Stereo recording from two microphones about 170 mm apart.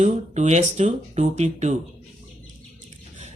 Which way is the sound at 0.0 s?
45° right (ahead or behind).